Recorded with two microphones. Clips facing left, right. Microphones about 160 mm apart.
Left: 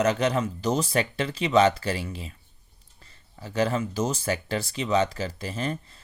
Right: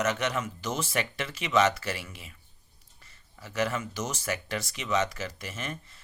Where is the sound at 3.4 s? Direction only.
30° left (ahead or behind).